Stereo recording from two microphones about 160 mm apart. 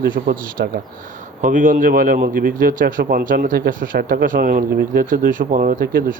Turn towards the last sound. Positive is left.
turn(degrees=-65)  # may be behind; listen again after turning